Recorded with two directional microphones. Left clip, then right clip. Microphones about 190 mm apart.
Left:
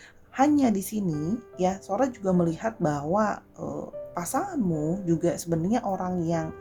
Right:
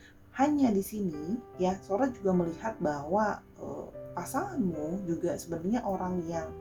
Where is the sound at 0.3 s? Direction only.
50° left (ahead or behind).